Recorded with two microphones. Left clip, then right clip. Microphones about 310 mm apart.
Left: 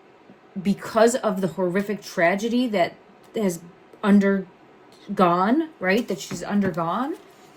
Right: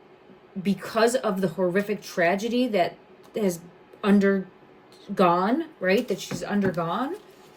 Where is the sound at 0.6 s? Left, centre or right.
Centre.